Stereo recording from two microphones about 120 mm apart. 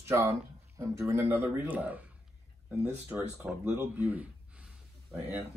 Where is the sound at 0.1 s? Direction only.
25° right (ahead or behind).